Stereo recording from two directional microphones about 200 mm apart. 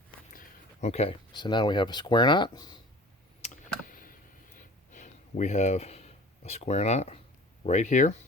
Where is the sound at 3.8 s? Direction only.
45° left (ahead or behind).